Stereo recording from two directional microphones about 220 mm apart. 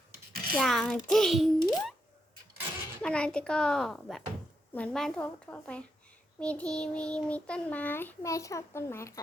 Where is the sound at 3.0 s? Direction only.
5° left (ahead or behind).